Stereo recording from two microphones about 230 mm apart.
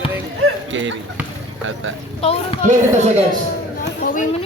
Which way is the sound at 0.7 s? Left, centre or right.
Right.